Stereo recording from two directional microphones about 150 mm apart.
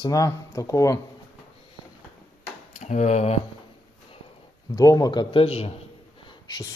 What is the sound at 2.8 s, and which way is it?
Speech, 50° left (ahead or behind).